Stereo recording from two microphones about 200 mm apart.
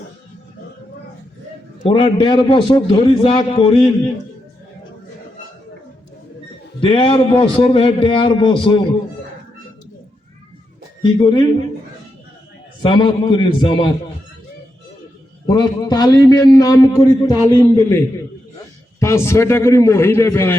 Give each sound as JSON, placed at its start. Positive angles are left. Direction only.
{"t": 1.9, "sound": "a man's voice", "side_deg": 30}
{"t": 6.7, "sound": "a man's voice", "side_deg": 25}
{"t": 11.0, "sound": "a man's voice", "side_deg": 25}
{"t": 12.8, "sound": "a man's voice", "side_deg": 25}
{"t": 15.4, "sound": "a man's voice", "side_deg": 20}